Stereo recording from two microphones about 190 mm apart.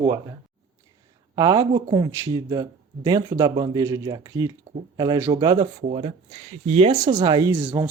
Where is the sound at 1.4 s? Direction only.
20° right (ahead or behind).